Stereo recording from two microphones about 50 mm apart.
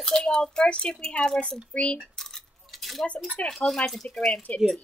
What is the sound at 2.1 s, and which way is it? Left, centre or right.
Coin, centre.